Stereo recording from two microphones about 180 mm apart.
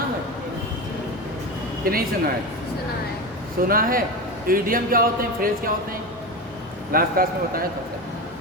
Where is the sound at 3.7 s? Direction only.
50° right (ahead or behind).